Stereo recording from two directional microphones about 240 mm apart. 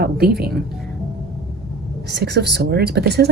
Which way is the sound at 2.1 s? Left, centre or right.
Right.